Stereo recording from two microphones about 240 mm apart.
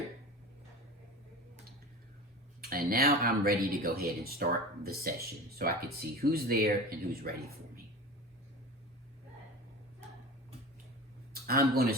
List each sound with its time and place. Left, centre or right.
2.6 s speech: right
11.4 s speech: right